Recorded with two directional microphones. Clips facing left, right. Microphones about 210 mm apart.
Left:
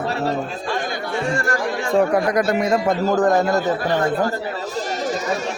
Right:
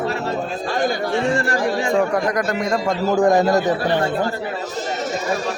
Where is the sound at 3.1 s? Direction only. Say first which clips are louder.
Right 4 dB; 15° right (ahead or behind).